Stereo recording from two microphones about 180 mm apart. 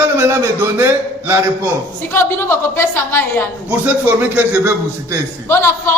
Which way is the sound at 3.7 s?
10° right (ahead or behind).